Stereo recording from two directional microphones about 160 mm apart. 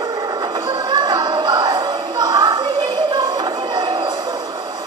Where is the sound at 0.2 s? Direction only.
25° right (ahead or behind).